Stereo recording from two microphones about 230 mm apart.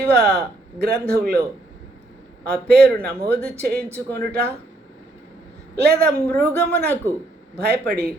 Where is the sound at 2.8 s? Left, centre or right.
Right.